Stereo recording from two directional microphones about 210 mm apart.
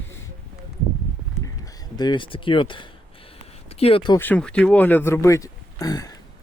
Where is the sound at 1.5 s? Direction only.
15° left (ahead or behind).